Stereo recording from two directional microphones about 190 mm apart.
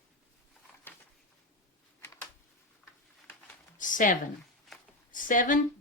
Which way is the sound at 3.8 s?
45° left (ahead or behind).